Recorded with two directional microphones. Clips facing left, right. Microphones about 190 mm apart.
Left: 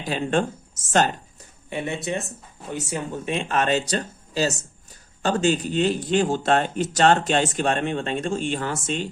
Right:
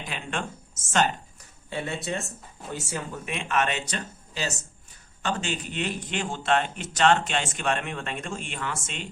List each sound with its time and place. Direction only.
0.0 s speech: 35° left (ahead or behind)
1.7 s speech: 20° left (ahead or behind)
3.2 s speech: 35° left (ahead or behind)